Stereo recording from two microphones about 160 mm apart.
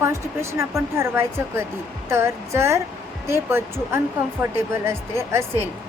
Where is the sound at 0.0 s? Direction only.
15° right (ahead or behind).